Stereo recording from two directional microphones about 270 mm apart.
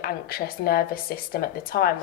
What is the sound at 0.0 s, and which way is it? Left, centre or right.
A woman's voice, left.